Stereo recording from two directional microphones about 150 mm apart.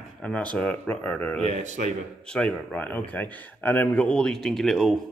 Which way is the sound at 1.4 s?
50° right (ahead or behind).